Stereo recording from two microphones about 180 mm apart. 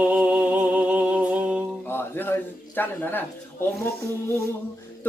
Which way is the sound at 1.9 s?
10° left (ahead or behind).